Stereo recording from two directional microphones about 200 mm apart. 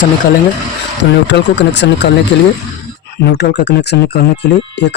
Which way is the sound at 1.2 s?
60° left (ahead or behind).